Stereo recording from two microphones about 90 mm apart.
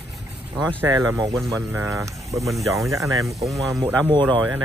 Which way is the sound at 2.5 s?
Centre (ahead or behind).